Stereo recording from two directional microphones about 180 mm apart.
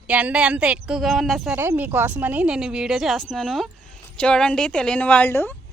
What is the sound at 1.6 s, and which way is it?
A woman's voice, 10° right (ahead or behind).